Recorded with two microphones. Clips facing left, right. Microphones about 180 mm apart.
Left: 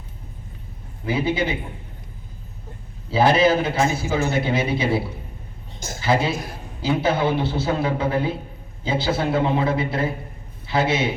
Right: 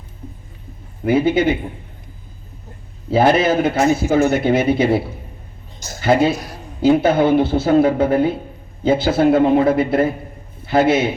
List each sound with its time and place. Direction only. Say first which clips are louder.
1.0 s speech: right 7 dB; 55° right (ahead or behind)
3.1 s a man's voice: right 3 dB; 55° right (ahead or behind)
6.0 s a man's voice: right 6 dB; 55° right (ahead or behind)